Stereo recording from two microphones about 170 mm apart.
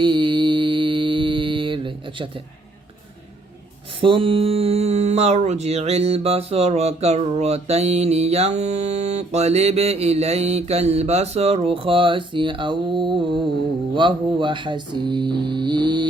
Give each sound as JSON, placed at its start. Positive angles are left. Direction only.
{"t": 0.0, "sound": "mantra", "side_deg": -30}
{"t": 4.0, "sound": "speech", "side_deg": -30}
{"t": 13.9, "sound": "music", "side_deg": -30}